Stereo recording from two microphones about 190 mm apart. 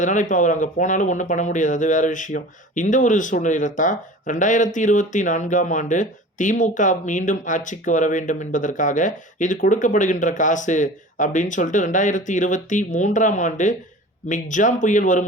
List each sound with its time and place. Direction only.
0.0 s speech: 40° left (ahead or behind)